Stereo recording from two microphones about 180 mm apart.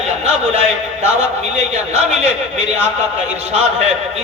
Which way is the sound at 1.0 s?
40° right (ahead or behind).